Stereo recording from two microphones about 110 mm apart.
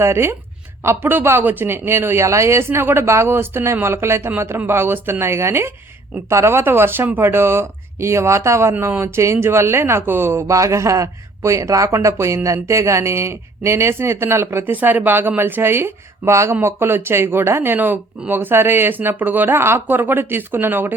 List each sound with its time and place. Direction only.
0.0 s speech: 25° right (ahead or behind)